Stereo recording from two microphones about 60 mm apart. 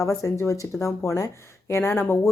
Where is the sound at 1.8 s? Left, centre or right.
Left.